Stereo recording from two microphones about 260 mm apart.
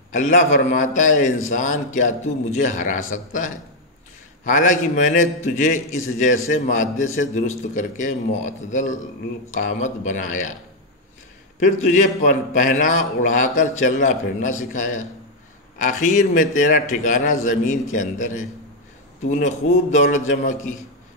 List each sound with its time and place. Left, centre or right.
0.1 s a man's voice: left
11.9 s a man's voice: left